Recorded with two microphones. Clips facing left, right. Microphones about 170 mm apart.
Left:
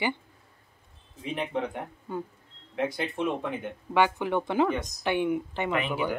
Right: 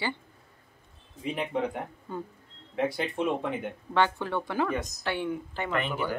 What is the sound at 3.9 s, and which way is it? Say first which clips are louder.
Speech: left 2 dB; 15° left (ahead or behind).